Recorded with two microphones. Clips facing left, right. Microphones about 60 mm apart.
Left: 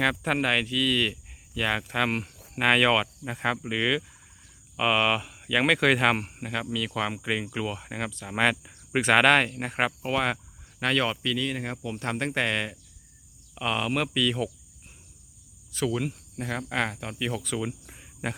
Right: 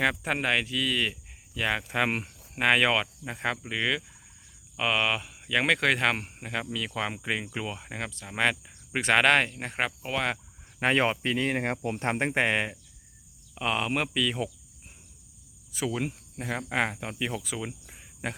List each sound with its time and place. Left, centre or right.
0.0 s speech: centre
10.8 s speech: right
12.0 s speech: right
13.6 s speech: centre
15.7 s speech: centre